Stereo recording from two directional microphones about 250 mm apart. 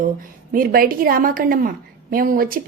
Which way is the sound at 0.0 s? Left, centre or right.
Right.